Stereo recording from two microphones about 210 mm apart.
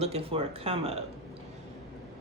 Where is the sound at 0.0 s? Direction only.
30° right (ahead or behind).